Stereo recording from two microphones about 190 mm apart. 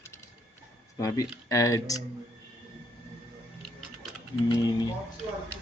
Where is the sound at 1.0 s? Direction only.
15° left (ahead or behind).